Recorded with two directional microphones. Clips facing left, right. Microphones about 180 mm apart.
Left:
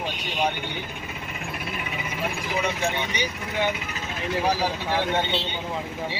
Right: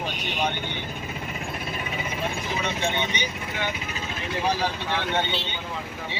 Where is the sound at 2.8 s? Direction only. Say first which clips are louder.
Even; 25° right (ahead or behind).